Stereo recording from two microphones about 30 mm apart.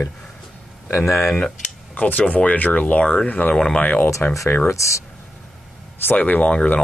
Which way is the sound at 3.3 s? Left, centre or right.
Left.